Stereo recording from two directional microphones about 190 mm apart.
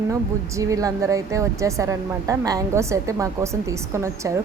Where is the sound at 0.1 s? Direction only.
15° right (ahead or behind).